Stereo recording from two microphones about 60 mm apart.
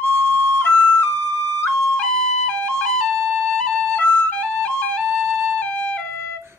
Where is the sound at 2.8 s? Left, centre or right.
Centre.